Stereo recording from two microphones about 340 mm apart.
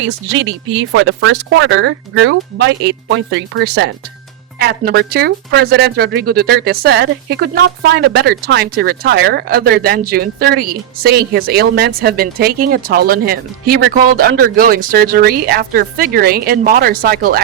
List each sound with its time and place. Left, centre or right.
0.3 s speech: right